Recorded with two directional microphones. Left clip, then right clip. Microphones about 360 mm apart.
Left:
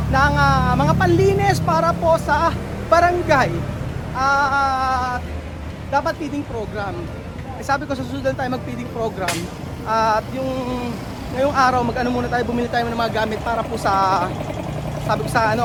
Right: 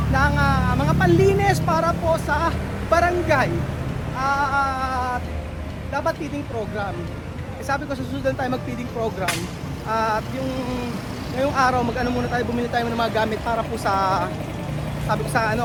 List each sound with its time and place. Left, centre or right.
0.1 s speech: centre
7.7 s speech: centre
11.3 s speech: centre